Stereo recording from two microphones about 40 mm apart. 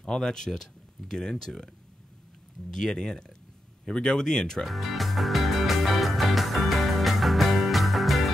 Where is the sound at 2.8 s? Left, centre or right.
Centre.